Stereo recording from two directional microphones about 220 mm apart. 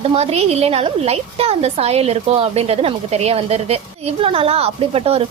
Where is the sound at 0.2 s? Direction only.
30° right (ahead or behind).